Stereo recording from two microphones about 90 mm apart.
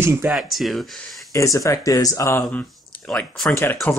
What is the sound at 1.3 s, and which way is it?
Speech, 35° left (ahead or behind).